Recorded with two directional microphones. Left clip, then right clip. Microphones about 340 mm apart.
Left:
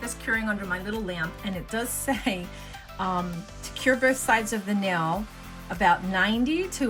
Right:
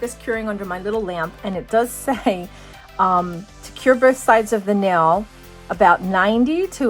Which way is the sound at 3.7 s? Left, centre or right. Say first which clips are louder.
Right 8 dB; centre.